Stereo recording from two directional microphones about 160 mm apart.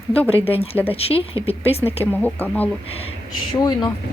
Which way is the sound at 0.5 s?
35° left (ahead or behind).